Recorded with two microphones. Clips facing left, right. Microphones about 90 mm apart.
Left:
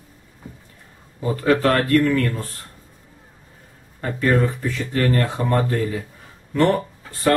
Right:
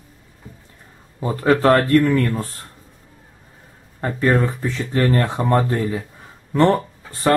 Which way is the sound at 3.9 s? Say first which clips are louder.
Right 1 dB; 25° right (ahead or behind).